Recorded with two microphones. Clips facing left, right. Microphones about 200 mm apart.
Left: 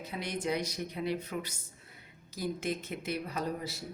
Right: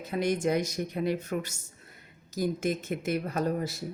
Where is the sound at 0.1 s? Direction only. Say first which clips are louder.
Right 8 dB; 45° right (ahead or behind).